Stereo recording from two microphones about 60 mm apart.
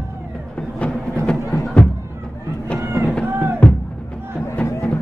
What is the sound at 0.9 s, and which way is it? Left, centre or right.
Music, centre.